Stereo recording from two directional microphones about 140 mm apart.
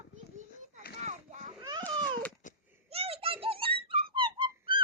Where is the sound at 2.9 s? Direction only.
45° right (ahead or behind).